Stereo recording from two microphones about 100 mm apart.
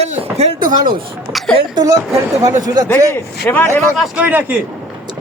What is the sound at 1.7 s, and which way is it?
Speech, 45° right (ahead or behind).